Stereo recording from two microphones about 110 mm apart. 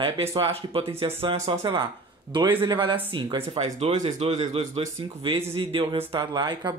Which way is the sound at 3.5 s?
80° right.